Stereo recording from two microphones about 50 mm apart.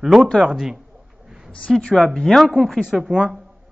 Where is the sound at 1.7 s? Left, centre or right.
Centre.